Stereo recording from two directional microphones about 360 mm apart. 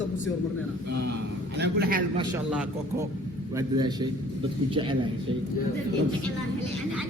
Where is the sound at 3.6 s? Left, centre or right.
Centre.